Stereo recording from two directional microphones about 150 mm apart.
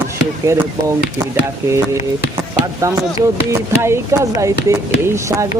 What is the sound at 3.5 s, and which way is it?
Speech, 20° right (ahead or behind).